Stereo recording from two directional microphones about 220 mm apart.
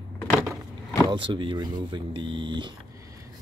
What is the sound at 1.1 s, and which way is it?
Speech, 20° right (ahead or behind).